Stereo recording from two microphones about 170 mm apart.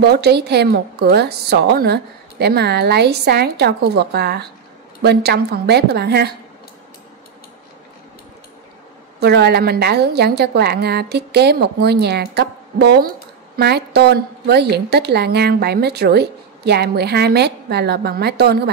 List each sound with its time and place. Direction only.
0.0 s a woman's voice: 75° right (ahead or behind)
9.2 s a woman's voice: 75° right (ahead or behind)